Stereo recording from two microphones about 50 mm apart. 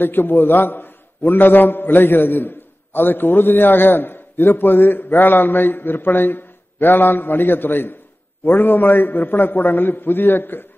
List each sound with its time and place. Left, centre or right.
0.0 s a man's voice: left